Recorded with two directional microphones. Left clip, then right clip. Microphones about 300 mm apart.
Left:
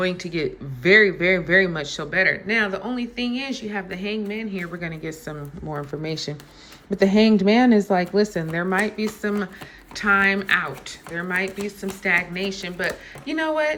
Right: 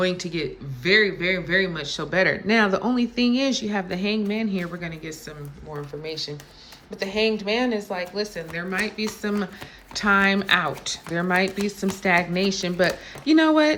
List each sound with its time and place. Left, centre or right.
0.0 s speech: centre
6.0 s speech: centre